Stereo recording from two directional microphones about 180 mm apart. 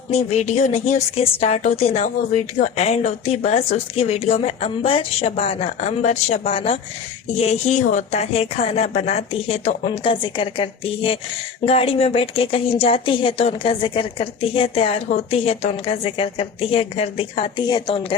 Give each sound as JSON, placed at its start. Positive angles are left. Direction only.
{"t": 0.1, "sound": "a woman's voice", "side_deg": 35}